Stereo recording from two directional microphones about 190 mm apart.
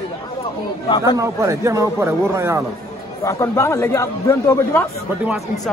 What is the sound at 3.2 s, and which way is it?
Speech, 15° left (ahead or behind).